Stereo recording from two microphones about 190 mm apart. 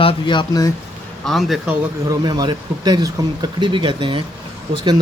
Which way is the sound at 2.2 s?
20° right (ahead or behind).